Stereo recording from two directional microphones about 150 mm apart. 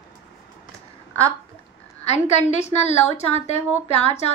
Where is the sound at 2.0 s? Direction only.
45° left (ahead or behind).